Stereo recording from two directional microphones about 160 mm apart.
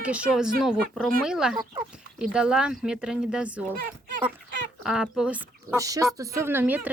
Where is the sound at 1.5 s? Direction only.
25° right (ahead or behind).